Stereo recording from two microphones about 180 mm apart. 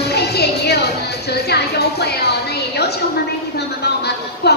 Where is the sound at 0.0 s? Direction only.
65° left (ahead or behind).